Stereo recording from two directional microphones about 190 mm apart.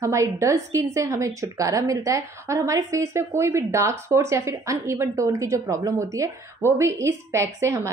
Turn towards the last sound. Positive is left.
turn(degrees=-15)  # may be behind; listen again after turning